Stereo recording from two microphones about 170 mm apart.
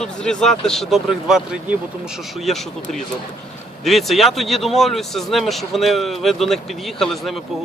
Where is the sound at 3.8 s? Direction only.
Centre (ahead or behind).